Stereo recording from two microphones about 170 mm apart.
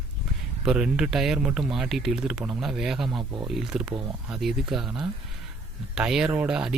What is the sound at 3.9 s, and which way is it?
Speech, 30° right (ahead or behind).